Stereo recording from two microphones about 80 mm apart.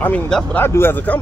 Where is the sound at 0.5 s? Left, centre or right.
Left.